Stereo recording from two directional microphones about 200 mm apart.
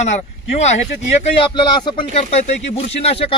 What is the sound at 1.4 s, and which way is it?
Speech, 25° left (ahead or behind).